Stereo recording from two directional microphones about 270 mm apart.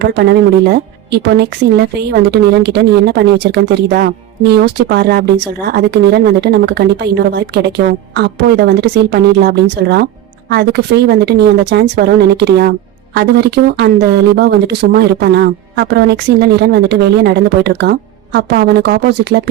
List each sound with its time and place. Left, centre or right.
0.0 s speech: right